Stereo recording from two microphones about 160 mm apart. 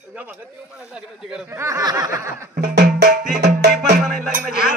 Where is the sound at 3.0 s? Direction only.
55° right (ahead or behind).